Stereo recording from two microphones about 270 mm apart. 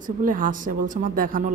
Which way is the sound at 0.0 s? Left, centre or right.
Right.